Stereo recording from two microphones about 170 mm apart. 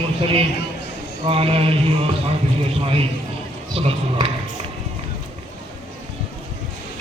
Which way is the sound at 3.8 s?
35° right (ahead or behind).